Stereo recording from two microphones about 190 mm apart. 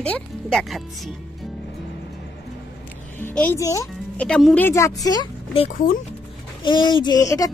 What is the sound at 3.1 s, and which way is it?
Speech, 10° left (ahead or behind).